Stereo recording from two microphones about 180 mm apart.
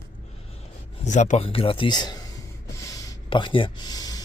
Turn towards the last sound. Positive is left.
turn(degrees=20)  # may be behind; listen again after turning